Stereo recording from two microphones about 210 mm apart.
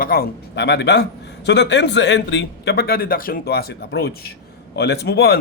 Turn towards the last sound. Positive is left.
turn(degrees=50)  # may be behind; listen again after turning